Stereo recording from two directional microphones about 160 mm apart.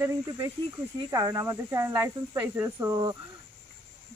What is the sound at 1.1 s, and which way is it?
Speech, 20° right (ahead or behind).